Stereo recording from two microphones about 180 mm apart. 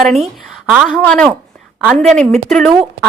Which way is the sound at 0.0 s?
Centre (ahead or behind).